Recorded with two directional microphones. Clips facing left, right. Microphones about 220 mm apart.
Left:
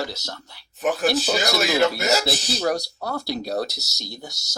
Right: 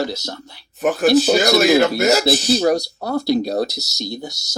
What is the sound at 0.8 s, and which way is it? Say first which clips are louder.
Speech: right 7 dB; 50° right (ahead or behind).